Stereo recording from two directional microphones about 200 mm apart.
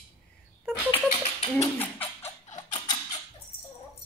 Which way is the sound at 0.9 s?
30° left (ahead or behind).